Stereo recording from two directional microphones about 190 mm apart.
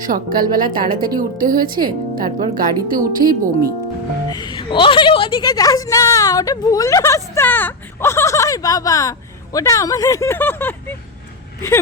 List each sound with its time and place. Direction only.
0.1 s speech: 50° right (ahead or behind)
4.3 s a woman's voice: 25° left (ahead or behind)